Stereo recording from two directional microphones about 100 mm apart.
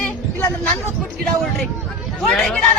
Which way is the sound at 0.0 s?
20° left (ahead or behind).